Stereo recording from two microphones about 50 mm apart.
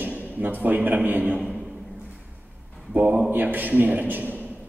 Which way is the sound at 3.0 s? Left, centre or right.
Right.